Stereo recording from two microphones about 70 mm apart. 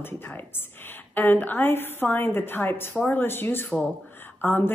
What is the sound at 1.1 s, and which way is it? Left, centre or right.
A woman's voice, left.